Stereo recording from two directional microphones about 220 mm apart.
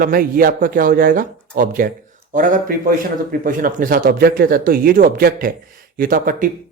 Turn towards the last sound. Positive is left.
turn(degrees=-40)  # may be behind; listen again after turning